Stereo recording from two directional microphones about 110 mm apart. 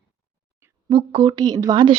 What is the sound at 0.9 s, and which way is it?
Speech, 55° right (ahead or behind).